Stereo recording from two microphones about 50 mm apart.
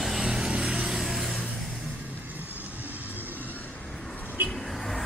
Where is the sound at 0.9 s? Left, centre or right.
Centre.